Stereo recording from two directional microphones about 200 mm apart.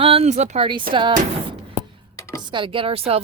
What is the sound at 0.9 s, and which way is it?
Speech, 50° right (ahead or behind).